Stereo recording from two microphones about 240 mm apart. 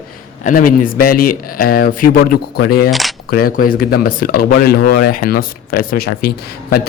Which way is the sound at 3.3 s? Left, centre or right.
Left.